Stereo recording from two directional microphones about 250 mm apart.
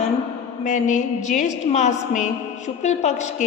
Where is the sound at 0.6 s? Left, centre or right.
Left.